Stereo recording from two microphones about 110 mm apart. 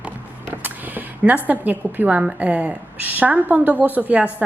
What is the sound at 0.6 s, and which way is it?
A woman's voice, 15° right (ahead or behind).